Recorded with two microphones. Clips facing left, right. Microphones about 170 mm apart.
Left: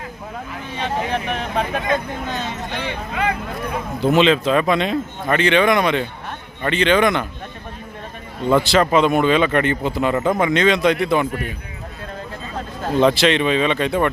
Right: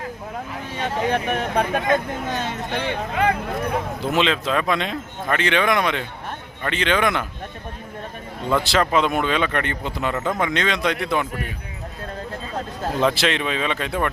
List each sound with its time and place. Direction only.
1.3 s speech: 45° right (ahead or behind)
4.0 s speech: centre (ahead or behind)
8.4 s speech: centre (ahead or behind)
13.0 s speech: centre (ahead or behind)